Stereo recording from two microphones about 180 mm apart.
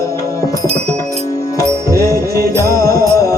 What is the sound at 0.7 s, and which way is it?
Music, 35° right (ahead or behind).